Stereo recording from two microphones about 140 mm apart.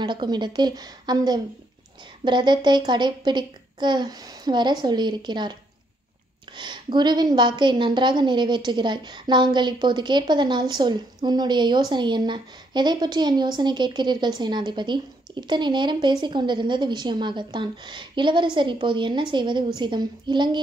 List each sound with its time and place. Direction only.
0.0 s a woman's voice: 35° right (ahead or behind)